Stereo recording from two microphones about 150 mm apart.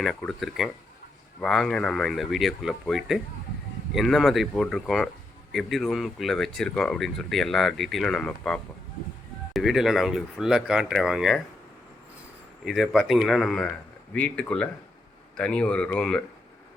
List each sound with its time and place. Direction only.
0.0 s speech: centre (ahead or behind)
12.6 s speech: centre (ahead or behind)